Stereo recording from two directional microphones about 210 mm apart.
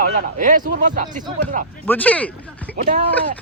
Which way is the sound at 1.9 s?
5° left (ahead or behind).